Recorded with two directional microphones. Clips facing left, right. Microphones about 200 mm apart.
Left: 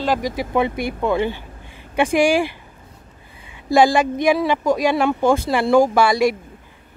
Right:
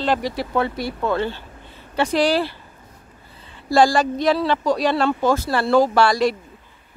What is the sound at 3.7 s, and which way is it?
Speech, 15° left (ahead or behind).